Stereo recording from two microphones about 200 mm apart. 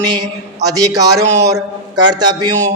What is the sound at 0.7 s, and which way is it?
A man's voice, 20° right (ahead or behind).